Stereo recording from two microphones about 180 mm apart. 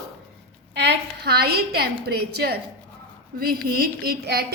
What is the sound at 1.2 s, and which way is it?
A woman's voice, 60° right (ahead or behind).